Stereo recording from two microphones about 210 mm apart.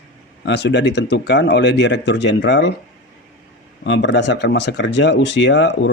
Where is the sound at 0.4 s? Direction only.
55° left (ahead or behind).